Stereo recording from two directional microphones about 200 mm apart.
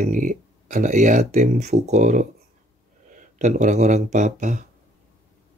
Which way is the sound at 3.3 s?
35° right (ahead or behind).